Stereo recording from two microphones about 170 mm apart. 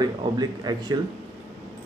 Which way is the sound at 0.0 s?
25° right (ahead or behind).